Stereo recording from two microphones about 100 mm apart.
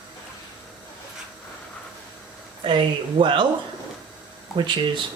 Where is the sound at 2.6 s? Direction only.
55° right (ahead or behind).